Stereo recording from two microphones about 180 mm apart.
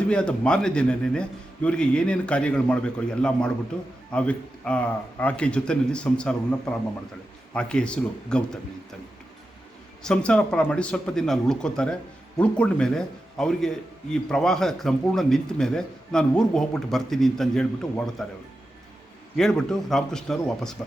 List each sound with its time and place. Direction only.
0.1 s a man's voice: 5° left (ahead or behind)
10.0 s speech: 5° left (ahead or behind)
19.4 s speech: 5° left (ahead or behind)